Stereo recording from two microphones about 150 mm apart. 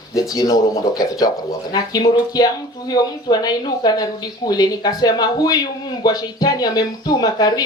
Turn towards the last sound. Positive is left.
turn(degrees=25)  # may be behind; listen again after turning